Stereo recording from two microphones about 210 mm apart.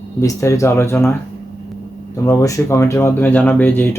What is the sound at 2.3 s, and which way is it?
Speech, 15° left (ahead or behind).